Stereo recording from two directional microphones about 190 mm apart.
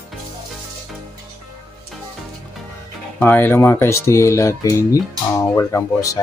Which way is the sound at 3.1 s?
10° left (ahead or behind).